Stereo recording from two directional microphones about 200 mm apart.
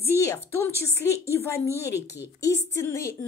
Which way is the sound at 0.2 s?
10° left (ahead or behind).